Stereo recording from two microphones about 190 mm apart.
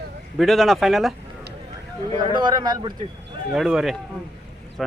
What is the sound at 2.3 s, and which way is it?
Speech, 25° right (ahead or behind).